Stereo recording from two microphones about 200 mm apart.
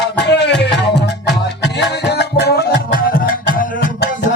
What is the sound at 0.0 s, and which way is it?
Music, 60° left (ahead or behind).